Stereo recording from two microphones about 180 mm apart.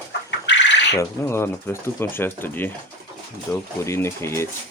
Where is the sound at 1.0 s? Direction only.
15° left (ahead or behind).